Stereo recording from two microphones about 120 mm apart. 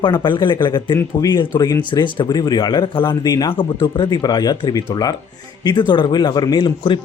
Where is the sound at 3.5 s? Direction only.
45° left (ahead or behind).